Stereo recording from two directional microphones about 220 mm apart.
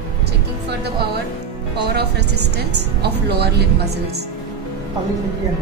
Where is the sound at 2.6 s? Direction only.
50° right (ahead or behind).